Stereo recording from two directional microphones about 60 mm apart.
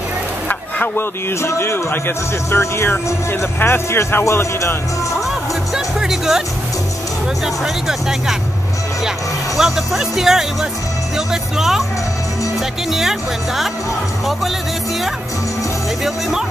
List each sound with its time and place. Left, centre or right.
0.5 s a sound: left
1.4 s a man's voice: left
1.9 s speech: left
4.2 s a man's voice: left
5.9 s speech: centre
7.4 s speech: centre
9.6 s speech: centre
12.9 s speech: centre
16.0 s speech: centre